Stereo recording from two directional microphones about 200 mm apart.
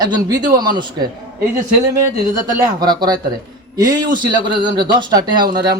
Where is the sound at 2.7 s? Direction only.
20° right (ahead or behind).